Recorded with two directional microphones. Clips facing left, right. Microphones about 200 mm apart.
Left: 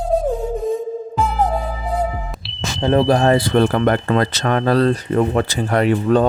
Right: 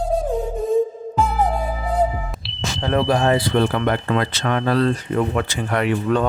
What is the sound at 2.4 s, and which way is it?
Sonar, centre (ahead or behind).